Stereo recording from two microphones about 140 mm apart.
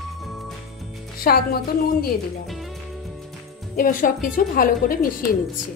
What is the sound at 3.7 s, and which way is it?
A woman's voice, 80° left.